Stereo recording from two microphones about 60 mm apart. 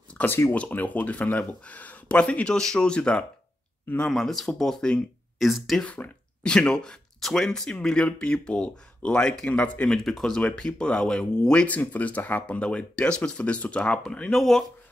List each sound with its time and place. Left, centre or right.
0.3 s speech: left
0.6 s speech: left
4.1 s speech: centre
5.4 s speech: centre
5.9 s speech: left
9.8 s speech: centre
10.4 s speech: centre
14.3 s speech: centre